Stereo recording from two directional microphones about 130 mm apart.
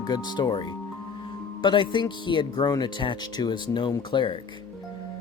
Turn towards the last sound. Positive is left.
turn(degrees=40)  # may be behind; listen again after turning